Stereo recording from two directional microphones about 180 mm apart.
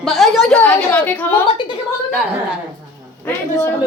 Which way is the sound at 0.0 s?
Centre (ahead or behind).